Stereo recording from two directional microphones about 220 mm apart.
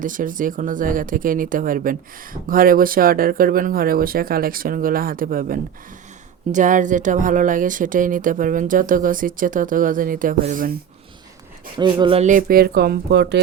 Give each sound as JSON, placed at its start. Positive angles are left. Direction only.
{"t": 0.0, "sound": "speech", "side_deg": -35}
{"t": 11.8, "sound": "speech", "side_deg": -20}